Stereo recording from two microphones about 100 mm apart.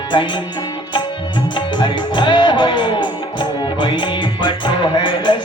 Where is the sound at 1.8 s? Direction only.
50° left (ahead or behind).